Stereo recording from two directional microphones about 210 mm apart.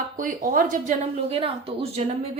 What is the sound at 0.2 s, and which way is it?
Speech, 40° right (ahead or behind).